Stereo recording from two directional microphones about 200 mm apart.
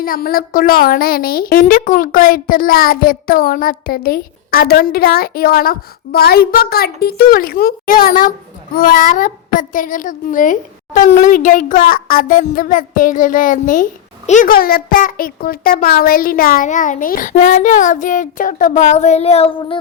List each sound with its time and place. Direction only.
0.0 s a child's voice: 45° left (ahead or behind); by 19.8 s 25° left (ahead or behind)